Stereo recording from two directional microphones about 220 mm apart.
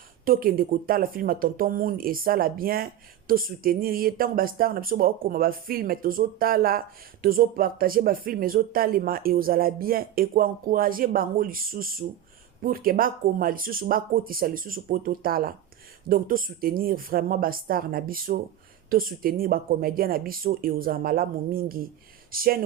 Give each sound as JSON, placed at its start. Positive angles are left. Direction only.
{"t": 0.3, "sound": "speech", "side_deg": -40}